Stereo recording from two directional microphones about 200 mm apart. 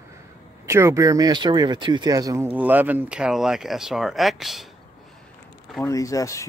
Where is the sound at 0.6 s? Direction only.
15° right (ahead or behind).